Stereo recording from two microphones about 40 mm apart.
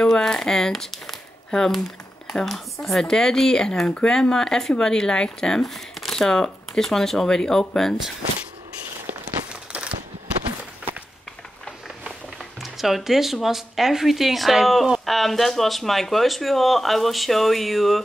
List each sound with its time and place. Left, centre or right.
0.0 s speech: centre
9.7 s a sound: right
12.6 s speech: centre